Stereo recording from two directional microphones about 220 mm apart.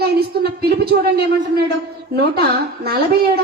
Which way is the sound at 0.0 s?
45° right (ahead or behind).